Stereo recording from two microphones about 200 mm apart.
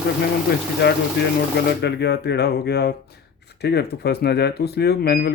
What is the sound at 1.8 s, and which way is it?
Speech, 55° left (ahead or behind).